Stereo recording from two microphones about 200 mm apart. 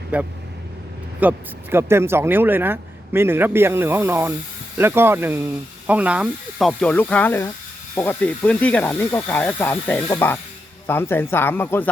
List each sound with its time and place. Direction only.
0.1 s speech: 5° right (ahead or behind); by 11.9 s 10° left (ahead or behind)